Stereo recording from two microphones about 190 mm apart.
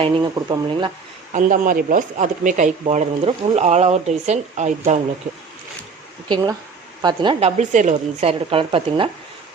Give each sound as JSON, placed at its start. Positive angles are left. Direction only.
{"t": 0.0, "sound": "a woman's voice", "side_deg": -25}
{"t": 1.3, "sound": "speech", "side_deg": -40}
{"t": 6.2, "sound": "a woman's voice", "side_deg": -20}